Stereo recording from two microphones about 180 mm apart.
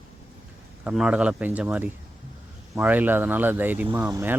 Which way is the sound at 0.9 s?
5° right (ahead or behind).